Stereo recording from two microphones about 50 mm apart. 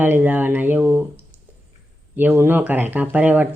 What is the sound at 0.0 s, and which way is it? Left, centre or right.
Speech, right.